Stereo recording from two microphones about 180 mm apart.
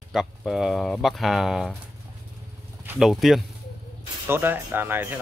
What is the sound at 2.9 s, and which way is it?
Speech, centre (ahead or behind).